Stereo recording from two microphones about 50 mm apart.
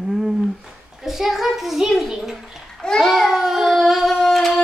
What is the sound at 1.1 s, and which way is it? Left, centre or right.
A child's voice, centre.